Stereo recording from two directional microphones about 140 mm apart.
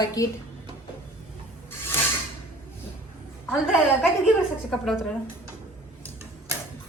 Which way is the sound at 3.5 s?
Centre (ahead or behind).